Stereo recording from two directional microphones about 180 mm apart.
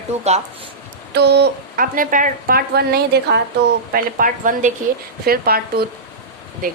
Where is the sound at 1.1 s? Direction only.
70° right (ahead or behind).